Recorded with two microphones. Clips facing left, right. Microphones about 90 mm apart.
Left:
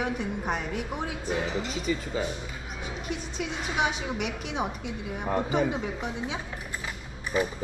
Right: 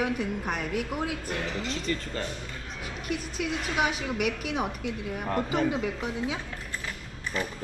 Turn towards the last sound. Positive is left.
turn(degrees=15)  # may be behind; listen again after turning